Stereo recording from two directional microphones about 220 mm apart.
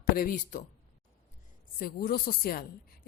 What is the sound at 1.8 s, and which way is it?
Speech, 40° left (ahead or behind).